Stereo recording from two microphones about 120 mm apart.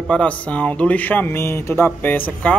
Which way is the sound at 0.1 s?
10° left (ahead or behind).